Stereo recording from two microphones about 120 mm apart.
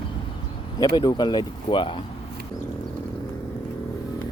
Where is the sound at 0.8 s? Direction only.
35° left (ahead or behind).